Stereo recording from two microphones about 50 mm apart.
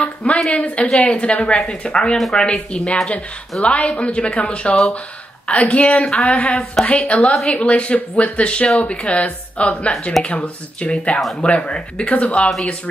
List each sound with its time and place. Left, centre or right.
0.0 s speech: left
6.0 s a sound: centre
6.3 s speech: left
12.4 s speech: centre